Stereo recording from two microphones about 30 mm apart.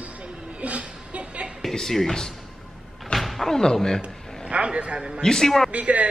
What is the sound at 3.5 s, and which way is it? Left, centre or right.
Speech, centre.